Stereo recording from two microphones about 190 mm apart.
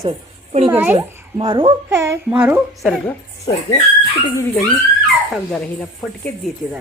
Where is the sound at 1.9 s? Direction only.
15° right (ahead or behind).